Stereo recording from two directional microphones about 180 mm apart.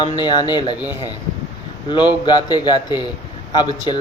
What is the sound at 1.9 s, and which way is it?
A man's voice, 25° left (ahead or behind).